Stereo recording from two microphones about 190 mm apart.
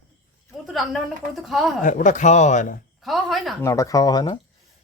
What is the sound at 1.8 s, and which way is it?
Speech, 45° left (ahead or behind).